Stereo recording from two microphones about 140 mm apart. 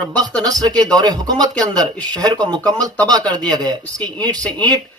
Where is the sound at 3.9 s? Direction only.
10° left (ahead or behind).